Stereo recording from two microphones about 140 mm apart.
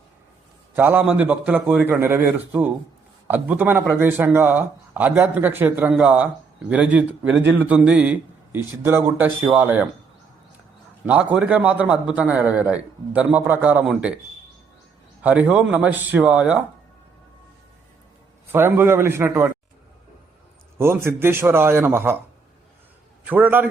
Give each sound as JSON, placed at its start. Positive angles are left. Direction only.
{"t": 0.8, "sound": "a man's voice", "side_deg": -15}
{"t": 11.0, "sound": "a man's voice", "side_deg": -10}
{"t": 15.2, "sound": "a man's voice", "side_deg": -10}
{"t": 18.5, "sound": "a man's voice", "side_deg": -15}
{"t": 20.7, "sound": "a man's voice", "side_deg": -15}
{"t": 23.2, "sound": "a man's voice", "side_deg": -15}